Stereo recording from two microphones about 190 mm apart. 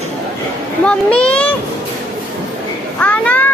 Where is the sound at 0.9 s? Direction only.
5° left (ahead or behind).